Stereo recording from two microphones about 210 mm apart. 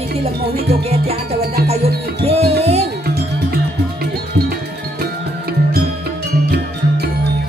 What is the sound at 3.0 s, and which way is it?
Music, 45° right (ahead or behind).